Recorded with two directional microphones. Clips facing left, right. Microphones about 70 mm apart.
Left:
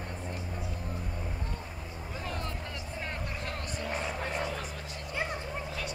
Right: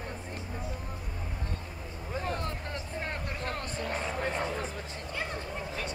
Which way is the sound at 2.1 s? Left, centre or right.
Right.